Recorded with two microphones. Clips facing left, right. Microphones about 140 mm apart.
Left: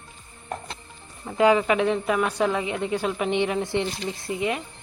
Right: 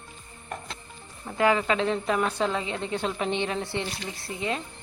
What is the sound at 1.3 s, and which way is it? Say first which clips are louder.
Speech: left 4 dB; 20° left (ahead or behind).